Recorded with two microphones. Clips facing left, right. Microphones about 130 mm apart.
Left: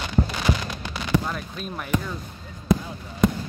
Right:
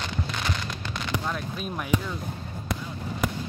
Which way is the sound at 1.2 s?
Centre (ahead or behind).